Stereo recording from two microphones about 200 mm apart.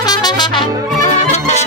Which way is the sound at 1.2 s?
35° left (ahead or behind).